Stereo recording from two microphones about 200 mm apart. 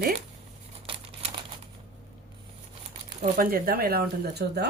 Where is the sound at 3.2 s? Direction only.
45° right (ahead or behind).